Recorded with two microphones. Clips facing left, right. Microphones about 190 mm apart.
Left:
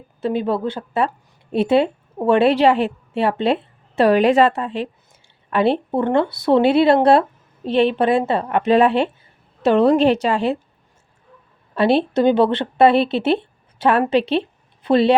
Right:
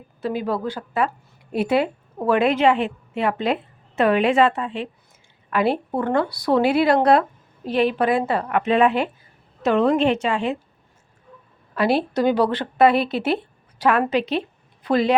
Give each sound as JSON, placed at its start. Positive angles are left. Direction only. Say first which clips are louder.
{"t": 0.2, "sound": "a woman's voice", "louder": "left 4 dB", "side_deg": 25}
{"t": 5.5, "sound": "a woman's voice", "louder": "left 3 dB", "side_deg": 25}
{"t": 11.7, "sound": "speech", "louder": "left 4 dB", "side_deg": 25}